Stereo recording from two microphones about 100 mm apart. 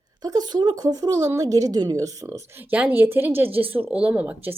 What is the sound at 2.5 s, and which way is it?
Speech, 15° right (ahead or behind).